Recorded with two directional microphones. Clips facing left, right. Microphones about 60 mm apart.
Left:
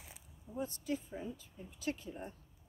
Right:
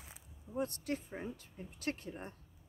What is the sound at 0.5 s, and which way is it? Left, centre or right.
A woman's voice, right.